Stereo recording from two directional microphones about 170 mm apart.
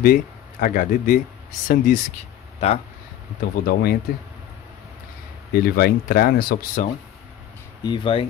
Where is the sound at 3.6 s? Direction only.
65° left (ahead or behind).